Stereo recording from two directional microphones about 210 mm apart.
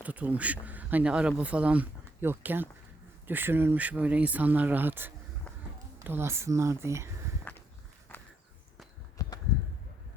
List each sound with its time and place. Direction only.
0.0 s speech: 5° right (ahead or behind)
7.5 s walk: 10° left (ahead or behind)
9.2 s a sound: 15° left (ahead or behind)